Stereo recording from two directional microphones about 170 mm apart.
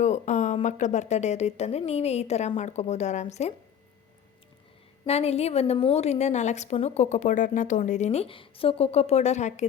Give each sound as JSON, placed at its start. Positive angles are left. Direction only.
{"t": 0.0, "sound": "a woman's voice", "side_deg": 45}
{"t": 5.0, "sound": "a woman's voice", "side_deg": 40}